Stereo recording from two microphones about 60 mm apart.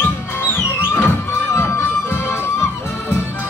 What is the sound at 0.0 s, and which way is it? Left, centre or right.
Music, left.